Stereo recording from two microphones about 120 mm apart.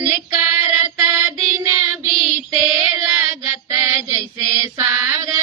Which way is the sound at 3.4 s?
20° right (ahead or behind).